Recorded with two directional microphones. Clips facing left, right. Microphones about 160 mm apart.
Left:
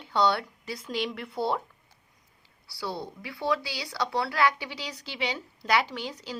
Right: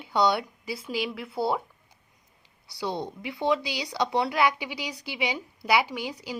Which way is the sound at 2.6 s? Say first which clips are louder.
Right 4 dB; 20° right (ahead or behind).